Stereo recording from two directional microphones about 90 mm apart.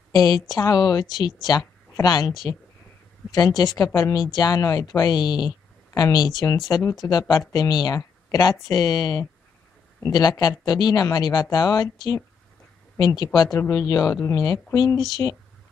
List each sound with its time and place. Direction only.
0.1 s a woman's voice: 50° left (ahead or behind)
6.8 s speech: 35° left (ahead or behind)
7.1 s speech: 50° left (ahead or behind)
15.2 s speech: 30° left (ahead or behind)